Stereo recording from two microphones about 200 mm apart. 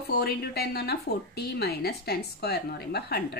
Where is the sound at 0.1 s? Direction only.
50° left (ahead or behind).